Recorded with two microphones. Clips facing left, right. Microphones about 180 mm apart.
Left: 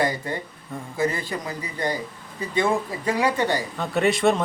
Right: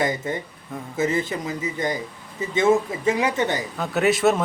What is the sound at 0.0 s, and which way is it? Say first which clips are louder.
Speech: right 1 dB; 20° right (ahead or behind).